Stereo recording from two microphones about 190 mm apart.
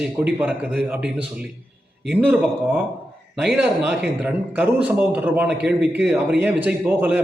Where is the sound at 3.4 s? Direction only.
5° right (ahead or behind).